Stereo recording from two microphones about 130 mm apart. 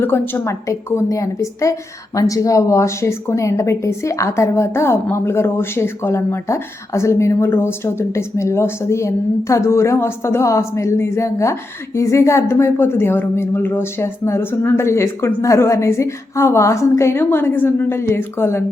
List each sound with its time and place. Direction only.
0.0 s a woman's voice: 15° left (ahead or behind)